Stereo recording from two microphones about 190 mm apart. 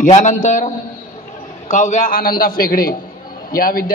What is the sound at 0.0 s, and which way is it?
Speech, 40° left (ahead or behind).